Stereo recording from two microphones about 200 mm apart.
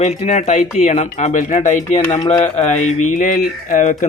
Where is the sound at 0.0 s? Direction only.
30° left (ahead or behind).